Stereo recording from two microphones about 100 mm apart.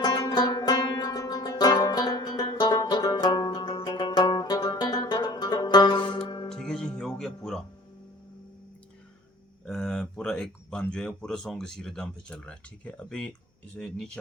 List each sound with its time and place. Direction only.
0.0 s music: 45° left (ahead or behind)
6.5 s music: 5° left (ahead or behind)
9.6 s speech: 5° left (ahead or behind)